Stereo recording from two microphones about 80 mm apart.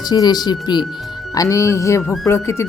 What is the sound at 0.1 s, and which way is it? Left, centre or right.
Speech, left.